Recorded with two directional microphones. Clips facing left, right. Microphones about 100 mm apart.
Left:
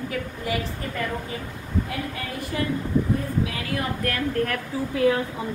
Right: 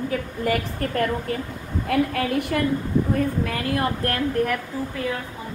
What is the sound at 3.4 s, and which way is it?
Speech, 50° right (ahead or behind).